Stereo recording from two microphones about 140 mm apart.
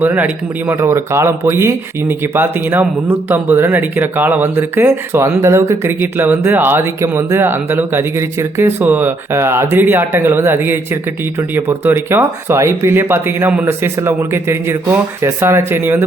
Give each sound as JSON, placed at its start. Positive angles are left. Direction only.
{"t": 0.0, "sound": "speech", "side_deg": -15}